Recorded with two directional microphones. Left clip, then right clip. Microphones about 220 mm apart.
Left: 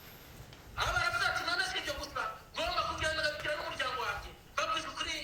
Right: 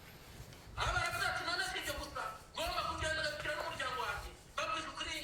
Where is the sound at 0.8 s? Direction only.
15° left (ahead or behind).